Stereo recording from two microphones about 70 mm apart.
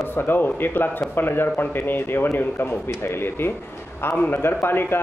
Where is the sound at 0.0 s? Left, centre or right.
Left.